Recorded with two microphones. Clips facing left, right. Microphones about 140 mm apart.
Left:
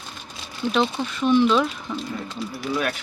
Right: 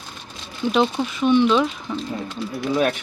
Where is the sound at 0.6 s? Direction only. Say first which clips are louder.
Right 3 dB; 5° right (ahead or behind).